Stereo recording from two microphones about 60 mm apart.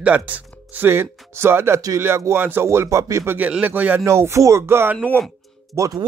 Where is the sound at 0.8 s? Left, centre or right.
Right.